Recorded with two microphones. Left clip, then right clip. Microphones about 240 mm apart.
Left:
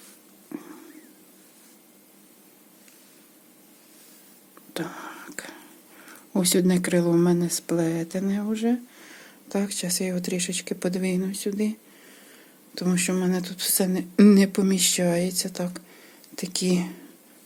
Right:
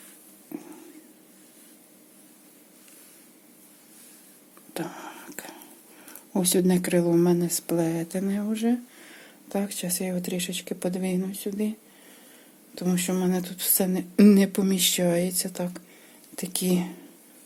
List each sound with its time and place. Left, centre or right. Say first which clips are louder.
0.5 s whispering: left 1 dB; centre
4.7 s speech: left 2 dB; centre